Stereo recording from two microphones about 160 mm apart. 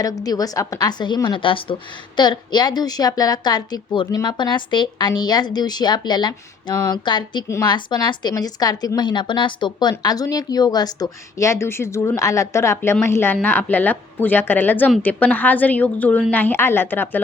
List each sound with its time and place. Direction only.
0.0 s a woman's voice: 25° left (ahead or behind)